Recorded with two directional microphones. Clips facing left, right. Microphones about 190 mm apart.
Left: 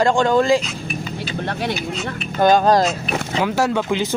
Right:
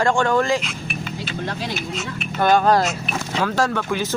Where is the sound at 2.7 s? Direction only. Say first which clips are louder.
Left 2 dB; 35° left (ahead or behind).